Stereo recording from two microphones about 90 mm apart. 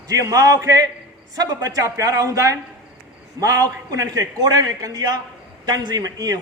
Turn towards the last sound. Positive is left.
turn(degrees=-45)  # may be behind; listen again after turning